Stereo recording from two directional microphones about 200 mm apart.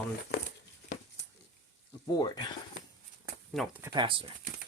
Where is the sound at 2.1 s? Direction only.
20° left (ahead or behind).